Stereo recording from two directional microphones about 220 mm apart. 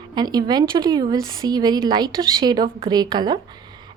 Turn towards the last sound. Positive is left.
turn(degrees=-20)  # may be behind; listen again after turning